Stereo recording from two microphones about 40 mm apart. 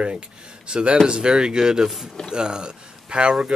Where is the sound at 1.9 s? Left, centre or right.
Centre.